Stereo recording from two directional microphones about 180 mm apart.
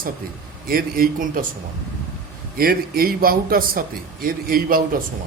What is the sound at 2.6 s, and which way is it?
A man's voice, 55° right (ahead or behind).